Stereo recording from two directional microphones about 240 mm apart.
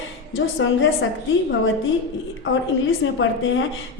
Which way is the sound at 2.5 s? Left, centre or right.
Left.